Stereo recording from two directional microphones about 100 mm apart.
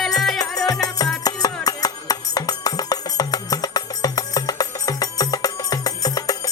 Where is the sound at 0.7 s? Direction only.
40° left (ahead or behind).